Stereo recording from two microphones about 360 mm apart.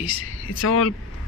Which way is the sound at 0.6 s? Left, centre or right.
Left.